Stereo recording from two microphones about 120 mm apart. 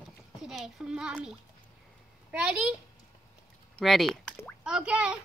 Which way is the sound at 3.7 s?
Centre (ahead or behind).